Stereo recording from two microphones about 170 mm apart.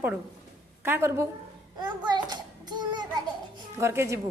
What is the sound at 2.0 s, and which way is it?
Child singing, 25° right (ahead or behind).